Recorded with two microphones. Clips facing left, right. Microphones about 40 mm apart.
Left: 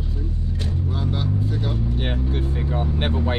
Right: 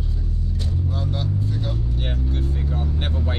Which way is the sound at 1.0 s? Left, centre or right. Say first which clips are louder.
Left 3 dB; centre.